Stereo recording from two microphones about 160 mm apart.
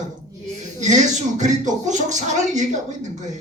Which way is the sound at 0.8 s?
50° right (ahead or behind).